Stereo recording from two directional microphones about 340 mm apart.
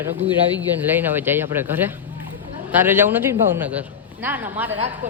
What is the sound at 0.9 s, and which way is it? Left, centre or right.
A man's voice, centre.